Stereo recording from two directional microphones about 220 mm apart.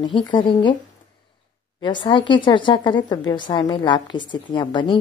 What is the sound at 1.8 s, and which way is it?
A woman's voice, 20° left (ahead or behind).